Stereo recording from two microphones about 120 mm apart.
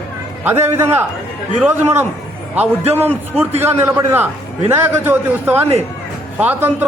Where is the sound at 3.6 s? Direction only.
20° right (ahead or behind).